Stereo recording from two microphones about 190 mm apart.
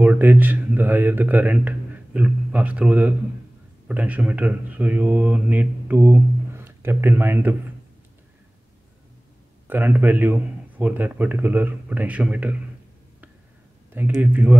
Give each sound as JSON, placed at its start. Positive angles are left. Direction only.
{"t": 0.0, "sound": "speech", "side_deg": -10}
{"t": 9.7, "sound": "speech", "side_deg": -10}
{"t": 13.9, "sound": "speech", "side_deg": -10}